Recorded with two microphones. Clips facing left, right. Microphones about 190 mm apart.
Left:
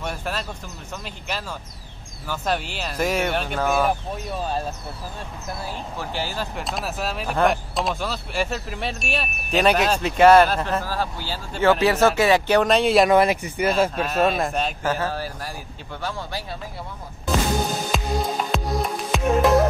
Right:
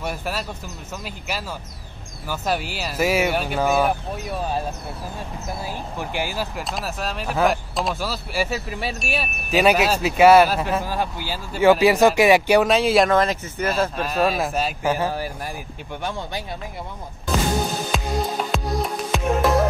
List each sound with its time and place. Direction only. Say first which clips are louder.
0.0 s speech: right 1 dB; 5° right (ahead or behind)
5.9 s speech: right 2 dB; 15° right (ahead or behind)
13.1 s speech: left 2 dB; 10° left (ahead or behind)
13.9 s speech: even; centre (ahead or behind); by 16.4 s 20° right (ahead or behind)
17.9 s speech: right 1 dB; centre (ahead or behind)
18.5 s music: even; centre (ahead or behind)